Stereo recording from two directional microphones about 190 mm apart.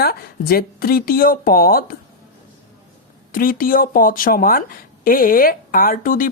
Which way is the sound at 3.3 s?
45° left (ahead or behind).